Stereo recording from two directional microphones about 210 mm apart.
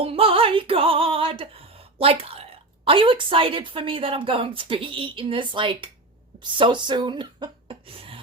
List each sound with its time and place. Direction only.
0.0 s music: 25° right (ahead or behind)
6.4 s speech: 20° right (ahead or behind)